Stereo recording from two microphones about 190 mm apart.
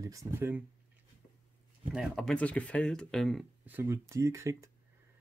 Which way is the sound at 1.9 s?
Centre (ahead or behind).